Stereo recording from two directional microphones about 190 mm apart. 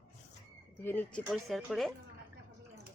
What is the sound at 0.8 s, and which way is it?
Speech, 10° left (ahead or behind).